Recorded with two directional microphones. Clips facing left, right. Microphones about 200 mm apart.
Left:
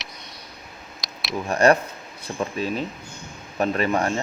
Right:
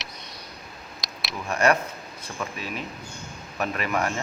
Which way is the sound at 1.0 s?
Centre (ahead or behind).